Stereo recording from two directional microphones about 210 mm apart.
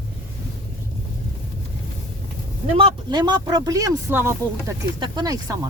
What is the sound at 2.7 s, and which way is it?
Speech, 25° right (ahead or behind).